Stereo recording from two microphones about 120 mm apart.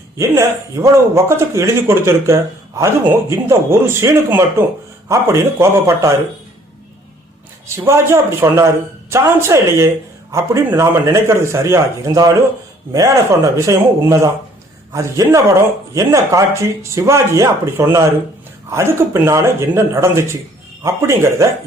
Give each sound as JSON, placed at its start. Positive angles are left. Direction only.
{"t": 0.2, "sound": "speech", "side_deg": -25}
{"t": 7.9, "sound": "speech", "side_deg": -25}